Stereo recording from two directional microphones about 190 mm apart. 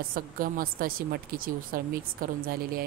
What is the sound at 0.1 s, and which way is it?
A woman's voice, 50° right (ahead or behind).